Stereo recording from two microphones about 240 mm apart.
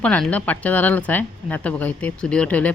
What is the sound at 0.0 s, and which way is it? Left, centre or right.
Speech, centre.